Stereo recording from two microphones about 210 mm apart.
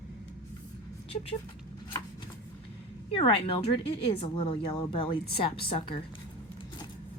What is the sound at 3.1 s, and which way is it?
A woman's voice, 25° left (ahead or behind).